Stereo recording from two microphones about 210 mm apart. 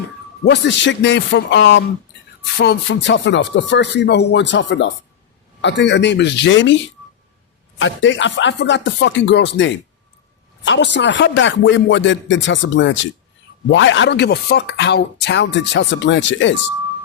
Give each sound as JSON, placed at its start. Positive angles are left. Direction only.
{"t": 0.4, "sound": "speech", "side_deg": 55}
{"t": 7.8, "sound": "speech", "side_deg": 60}